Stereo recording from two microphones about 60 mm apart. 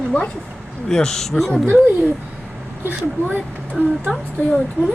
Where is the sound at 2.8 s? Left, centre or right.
Right.